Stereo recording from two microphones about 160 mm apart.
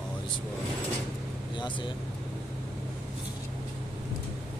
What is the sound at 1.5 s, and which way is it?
Speech, 30° left (ahead or behind).